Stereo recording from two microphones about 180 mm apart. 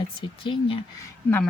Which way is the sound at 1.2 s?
10° left (ahead or behind).